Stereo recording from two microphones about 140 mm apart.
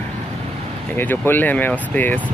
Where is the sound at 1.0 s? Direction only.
15° left (ahead or behind).